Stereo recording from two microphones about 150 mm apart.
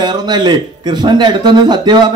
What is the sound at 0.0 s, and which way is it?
A man's voice, 30° right (ahead or behind).